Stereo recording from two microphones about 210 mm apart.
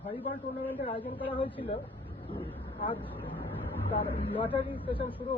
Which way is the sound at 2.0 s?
25° left (ahead or behind).